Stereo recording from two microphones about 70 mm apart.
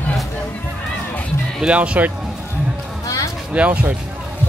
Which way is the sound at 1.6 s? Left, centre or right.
Centre.